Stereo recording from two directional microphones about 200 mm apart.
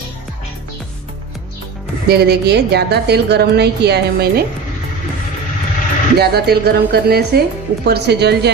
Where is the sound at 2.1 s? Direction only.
55° right (ahead or behind).